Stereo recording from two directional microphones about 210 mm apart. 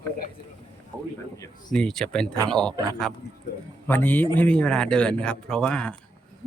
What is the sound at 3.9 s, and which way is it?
A man's voice, 10° left (ahead or behind).